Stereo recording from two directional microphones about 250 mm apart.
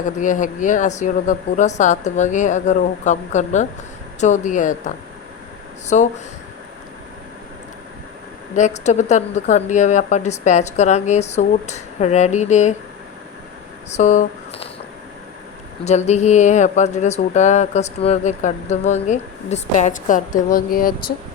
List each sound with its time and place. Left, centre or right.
0.2 s speech: left
8.5 s speech: left
13.9 s speech: left
15.8 s speech: left